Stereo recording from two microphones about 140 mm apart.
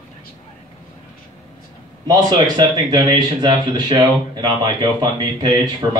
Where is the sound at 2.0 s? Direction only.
30° right (ahead or behind).